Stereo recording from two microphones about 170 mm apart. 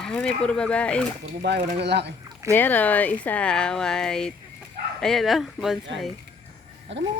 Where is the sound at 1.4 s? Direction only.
85° right.